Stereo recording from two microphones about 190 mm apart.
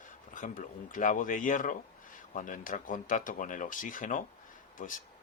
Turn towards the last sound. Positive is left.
turn(degrees=45)  # may be behind; listen again after turning